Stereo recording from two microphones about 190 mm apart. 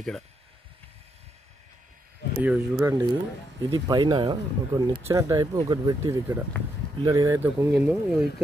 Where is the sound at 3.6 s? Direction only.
20° right (ahead or behind); by 8.2 s 5° right (ahead or behind).